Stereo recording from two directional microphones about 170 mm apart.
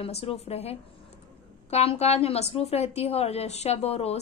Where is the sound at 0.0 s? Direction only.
35° left (ahead or behind).